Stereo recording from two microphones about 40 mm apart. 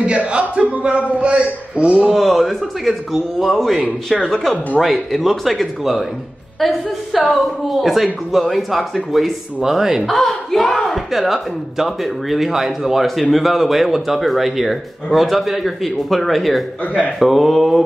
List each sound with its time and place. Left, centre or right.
0.0 s a man's voice: right
2.0 s speech: centre
10.0 s speech: centre